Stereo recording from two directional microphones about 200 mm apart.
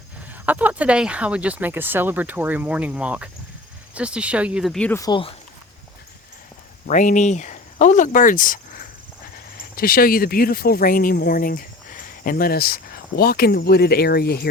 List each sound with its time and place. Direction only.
0.4 s speech: 10° right (ahead or behind); by 5.3 s 20° left (ahead or behind)
6.8 s speech: 40° left (ahead or behind)
9.7 s speech: 45° left (ahead or behind)